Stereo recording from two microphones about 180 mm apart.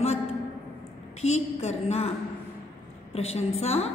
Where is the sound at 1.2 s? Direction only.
35° left (ahead or behind).